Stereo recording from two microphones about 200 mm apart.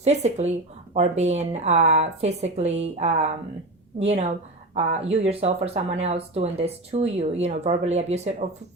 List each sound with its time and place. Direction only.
0.0 s speech: 35° right (ahead or behind)
4.7 s speech: 30° right (ahead or behind)